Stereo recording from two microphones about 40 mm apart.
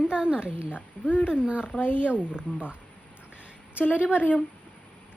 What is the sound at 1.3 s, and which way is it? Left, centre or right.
A woman's voice, right.